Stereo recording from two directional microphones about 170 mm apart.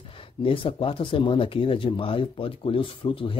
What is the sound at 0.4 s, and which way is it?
Speech, 30° left (ahead or behind).